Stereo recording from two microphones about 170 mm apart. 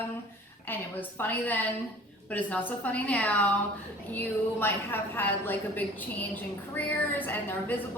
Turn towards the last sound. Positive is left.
turn(degrees=10)  # may be behind; listen again after turning